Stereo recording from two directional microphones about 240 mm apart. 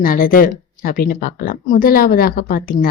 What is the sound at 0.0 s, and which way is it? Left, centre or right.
A woman's voice, left.